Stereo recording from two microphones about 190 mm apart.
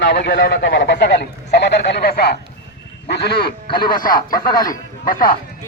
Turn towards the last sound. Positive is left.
turn(degrees=45)  # may be behind; listen again after turning